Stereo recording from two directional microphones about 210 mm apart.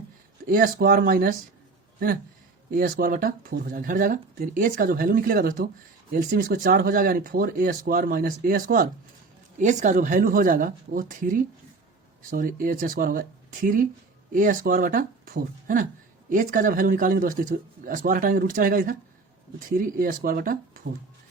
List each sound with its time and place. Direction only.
0.4 s speech: 45° right (ahead or behind)
2.6 s speech: 45° right (ahead or behind)